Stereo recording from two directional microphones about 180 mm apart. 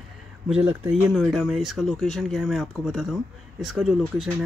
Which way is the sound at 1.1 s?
Centre (ahead or behind).